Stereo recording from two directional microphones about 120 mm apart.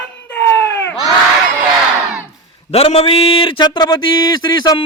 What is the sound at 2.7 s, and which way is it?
Speech, 60° left (ahead or behind).